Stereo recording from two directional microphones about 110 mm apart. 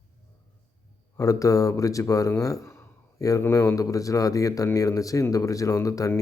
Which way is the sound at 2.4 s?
30° left (ahead or behind).